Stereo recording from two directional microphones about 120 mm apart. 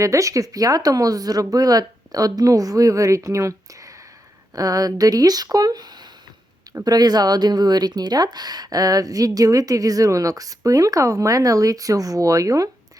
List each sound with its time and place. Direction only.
0.0 s speech: 25° right (ahead or behind)